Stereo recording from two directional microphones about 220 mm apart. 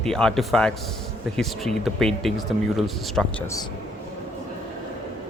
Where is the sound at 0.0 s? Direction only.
Centre (ahead or behind).